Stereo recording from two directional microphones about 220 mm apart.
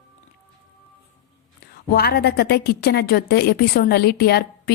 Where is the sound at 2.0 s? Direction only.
45° left (ahead or behind).